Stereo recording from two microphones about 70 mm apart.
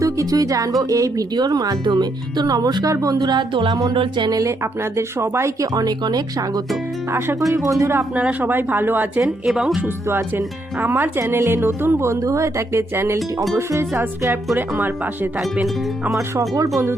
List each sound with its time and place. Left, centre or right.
0.0 s music: right
0.8 s speech: right
2.9 s speech: right
3.8 s speech: right
4.6 s speech: right
5.7 s speech: right
7.5 s speech: right
8.1 s a woman's voice: right
9.2 s speech: centre
10.1 s a woman's voice: right
11.2 s a woman's voice: right
15.6 s speech: centre
16.3 s speech: right